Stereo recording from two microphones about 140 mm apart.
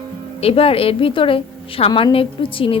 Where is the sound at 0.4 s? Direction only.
45° left (ahead or behind).